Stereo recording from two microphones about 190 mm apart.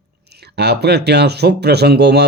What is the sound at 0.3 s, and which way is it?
Speech, 60° right (ahead or behind).